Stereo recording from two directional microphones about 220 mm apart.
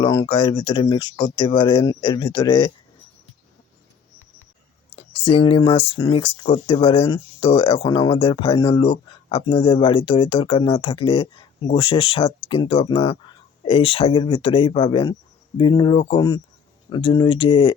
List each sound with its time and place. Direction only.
0.0 s speech: 20° left (ahead or behind)
5.3 s speech: 25° left (ahead or behind)